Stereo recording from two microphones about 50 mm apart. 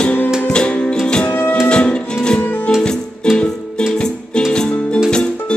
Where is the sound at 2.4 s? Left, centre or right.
Left.